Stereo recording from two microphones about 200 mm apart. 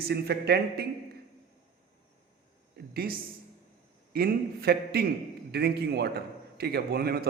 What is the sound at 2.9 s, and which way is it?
A man's voice, 50° right (ahead or behind).